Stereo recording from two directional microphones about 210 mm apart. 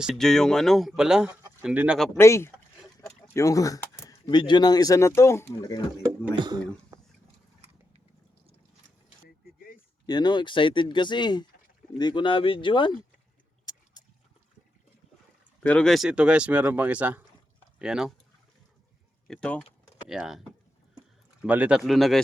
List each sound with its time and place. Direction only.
0.0 s speech: centre (ahead or behind)
2.1 s speech: 10° left (ahead or behind)
6.3 s speech: 20° right (ahead or behind)
6.9 s a sound: 15° right (ahead or behind)
10.1 s speech: 20° left (ahead or behind)
15.6 s speech: 5° left (ahead or behind)
19.3 s speech: 5° left (ahead or behind)